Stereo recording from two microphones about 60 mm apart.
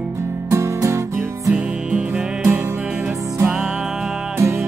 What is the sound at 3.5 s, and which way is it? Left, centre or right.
Music, centre.